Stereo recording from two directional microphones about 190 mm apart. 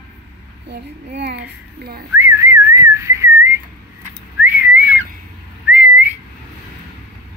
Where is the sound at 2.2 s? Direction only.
15° right (ahead or behind).